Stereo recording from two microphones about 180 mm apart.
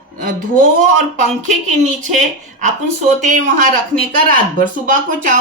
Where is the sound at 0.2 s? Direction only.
50° right (ahead or behind).